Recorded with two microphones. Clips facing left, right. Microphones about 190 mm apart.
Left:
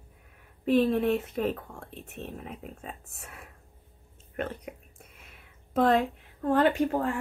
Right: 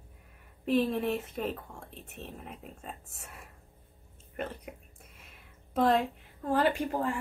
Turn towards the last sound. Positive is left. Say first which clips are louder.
# left 5 dB
turn(degrees=55)  # may be behind; listen again after turning